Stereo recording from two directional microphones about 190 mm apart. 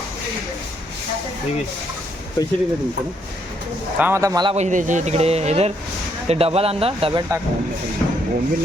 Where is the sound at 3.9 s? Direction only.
10° right (ahead or behind).